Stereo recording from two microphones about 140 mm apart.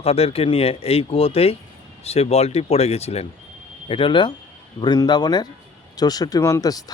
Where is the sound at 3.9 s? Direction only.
35° left (ahead or behind).